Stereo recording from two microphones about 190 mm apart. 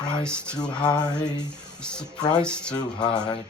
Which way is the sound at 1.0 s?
20° left (ahead or behind).